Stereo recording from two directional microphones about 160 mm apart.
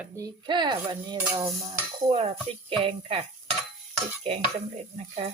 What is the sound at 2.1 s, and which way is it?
Speech, 40° right (ahead or behind).